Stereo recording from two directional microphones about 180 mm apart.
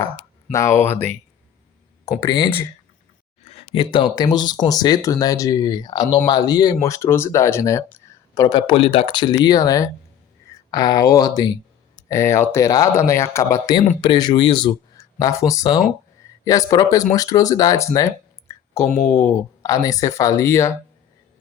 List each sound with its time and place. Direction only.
0.5 s speech: 15° left (ahead or behind)
3.4 s speech: 35° left (ahead or behind); by 20.7 s 15° left (ahead or behind)